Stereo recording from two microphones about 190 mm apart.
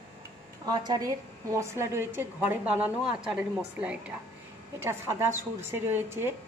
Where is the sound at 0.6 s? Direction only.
20° right (ahead or behind).